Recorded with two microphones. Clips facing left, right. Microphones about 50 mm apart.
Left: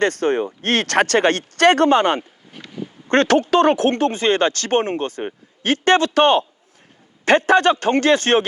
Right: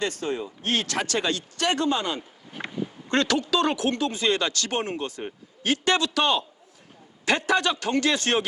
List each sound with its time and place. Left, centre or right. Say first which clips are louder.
0.0 s speech: left 10 dB; left
2.6 s a sound: right 6 dB; right
3.1 s a man's voice: left 8 dB; left